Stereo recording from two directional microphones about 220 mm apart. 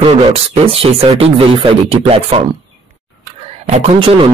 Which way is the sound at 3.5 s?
25° right (ahead or behind).